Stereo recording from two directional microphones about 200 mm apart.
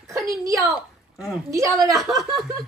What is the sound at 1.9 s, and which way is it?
Speech, centre (ahead or behind).